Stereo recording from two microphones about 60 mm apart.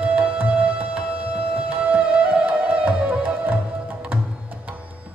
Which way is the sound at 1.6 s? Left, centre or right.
Centre.